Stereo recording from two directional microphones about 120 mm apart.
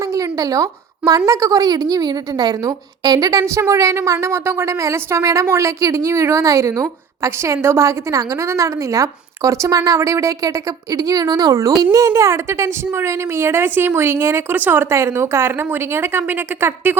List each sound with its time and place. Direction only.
0.1 s a woman's voice: 30° right (ahead or behind)